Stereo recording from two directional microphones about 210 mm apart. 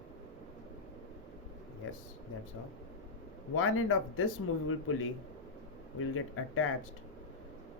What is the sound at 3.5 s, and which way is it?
Speech, 80° left.